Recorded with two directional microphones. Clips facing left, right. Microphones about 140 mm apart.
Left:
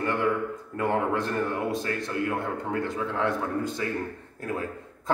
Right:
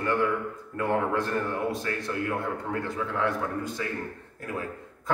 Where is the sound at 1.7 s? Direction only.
20° left (ahead or behind).